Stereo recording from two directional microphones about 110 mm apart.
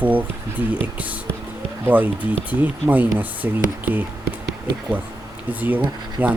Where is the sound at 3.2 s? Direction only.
15° right (ahead or behind).